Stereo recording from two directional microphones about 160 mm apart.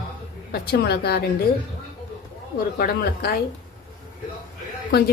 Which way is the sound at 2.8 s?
65° left (ahead or behind).